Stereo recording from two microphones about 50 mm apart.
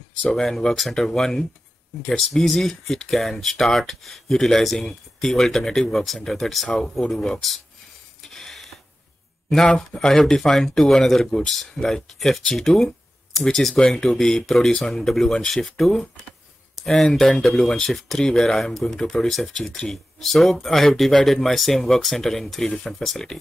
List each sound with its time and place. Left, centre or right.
0.4 s speech: centre
8.2 s a sound: centre
9.5 s speech: centre